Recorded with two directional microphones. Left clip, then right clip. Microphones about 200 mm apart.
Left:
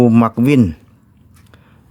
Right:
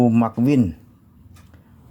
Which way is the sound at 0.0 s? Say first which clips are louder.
Left 6 dB; 35° left (ahead or behind).